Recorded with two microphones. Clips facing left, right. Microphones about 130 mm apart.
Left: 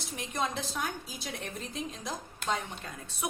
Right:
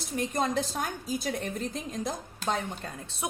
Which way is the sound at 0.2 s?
40° right (ahead or behind).